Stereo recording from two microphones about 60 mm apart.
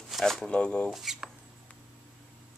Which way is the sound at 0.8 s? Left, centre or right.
Centre.